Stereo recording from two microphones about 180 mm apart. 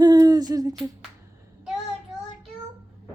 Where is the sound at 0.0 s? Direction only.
20° right (ahead or behind).